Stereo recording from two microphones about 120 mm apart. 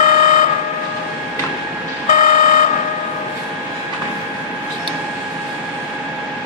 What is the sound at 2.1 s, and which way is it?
Vehicle, 90° left.